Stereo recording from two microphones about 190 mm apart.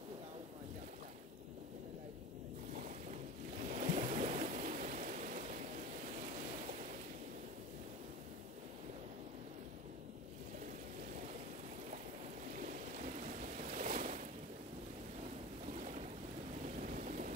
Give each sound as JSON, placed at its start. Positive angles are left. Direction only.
{"t": 3.7, "sound": "stream", "side_deg": -40}
{"t": 12.6, "sound": "a sound", "side_deg": -45}
{"t": 15.7, "sound": "boat", "side_deg": -40}
{"t": 16.8, "sound": "vehicle", "side_deg": -45}